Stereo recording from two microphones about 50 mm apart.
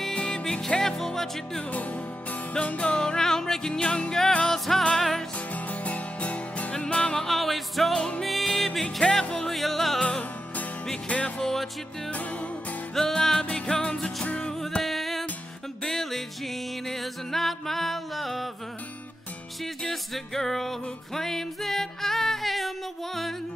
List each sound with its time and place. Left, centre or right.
0.1 s music: centre
1.7 s music: left
3.0 s music: centre
5.5 s music: left
7.2 s music: centre
9.5 s music: centre
10.0 s music: left
11.3 s music: centre
12.1 s music: left
12.9 s music: centre
14.2 s music: left
14.8 s music: centre
19.6 s music: centre